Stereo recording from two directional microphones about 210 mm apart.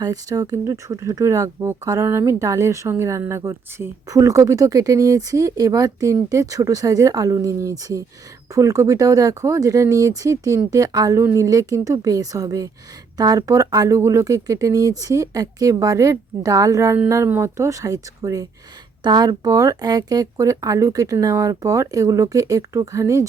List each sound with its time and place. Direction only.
0.0 s speech: 15° right (ahead or behind)